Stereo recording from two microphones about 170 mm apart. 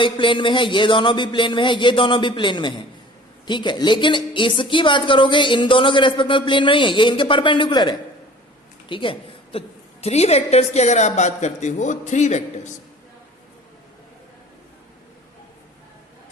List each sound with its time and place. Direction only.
0.0 s a woman's voice: 30° left (ahead or behind); by 12.4 s 45° left (ahead or behind)